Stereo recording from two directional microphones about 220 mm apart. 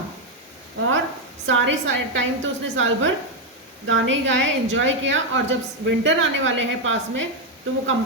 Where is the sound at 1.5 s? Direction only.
60° right (ahead or behind).